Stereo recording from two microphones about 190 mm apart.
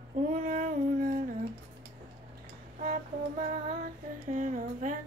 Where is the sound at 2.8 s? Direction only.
45° right (ahead or behind).